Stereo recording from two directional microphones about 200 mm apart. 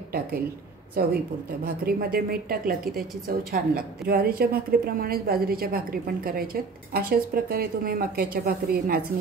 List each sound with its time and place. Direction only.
1.9 s a woman's voice: 50° right (ahead or behind)